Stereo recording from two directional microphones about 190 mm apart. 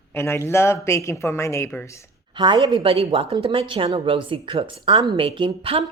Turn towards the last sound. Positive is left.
turn(degrees=-30)  # may be behind; listen again after turning